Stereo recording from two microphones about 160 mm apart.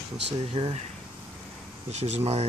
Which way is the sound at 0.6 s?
25° right (ahead or behind).